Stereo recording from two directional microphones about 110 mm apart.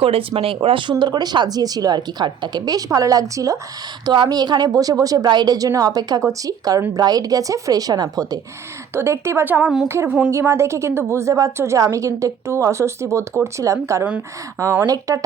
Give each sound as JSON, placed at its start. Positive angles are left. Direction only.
{"t": 0.0, "sound": "speech", "side_deg": -60}
{"t": 9.0, "sound": "a woman's voice", "side_deg": -25}
{"t": 10.3, "sound": "a woman's voice", "side_deg": -25}